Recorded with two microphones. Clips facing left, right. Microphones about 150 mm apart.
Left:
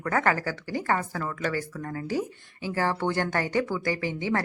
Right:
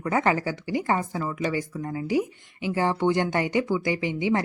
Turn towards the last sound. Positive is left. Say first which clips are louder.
# right 3 dB
turn(degrees=-15)  # may be behind; listen again after turning